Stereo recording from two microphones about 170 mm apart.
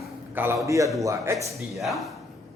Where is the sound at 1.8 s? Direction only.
Centre (ahead or behind).